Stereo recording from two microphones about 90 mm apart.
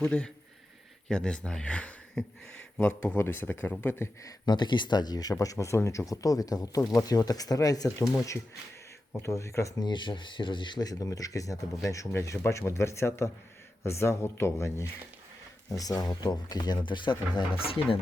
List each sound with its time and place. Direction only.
0.0 s speech: 10° left (ahead or behind); by 4.4 s 35° left (ahead or behind)
4.4 s speech: 55° left (ahead or behind)
5.3 s speech: 35° left (ahead or behind)
9.2 s speech: 35° left (ahead or behind)
9.8 s speech: 60° left (ahead or behind); by 14.8 s 30° left (ahead or behind)
15.7 s speech: 40° left (ahead or behind); by 17.6 s 60° left (ahead or behind)